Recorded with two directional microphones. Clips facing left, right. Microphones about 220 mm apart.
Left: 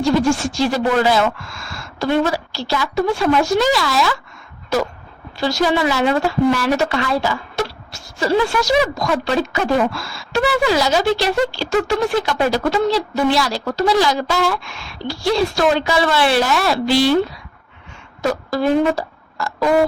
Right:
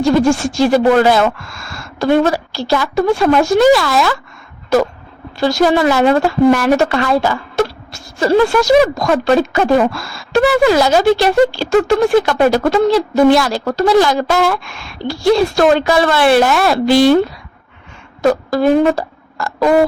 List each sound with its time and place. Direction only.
0.0 s a woman's voice: 50° right (ahead or behind)
5.4 s a woman's voice: 50° right (ahead or behind)
18.2 s speech: 50° right (ahead or behind)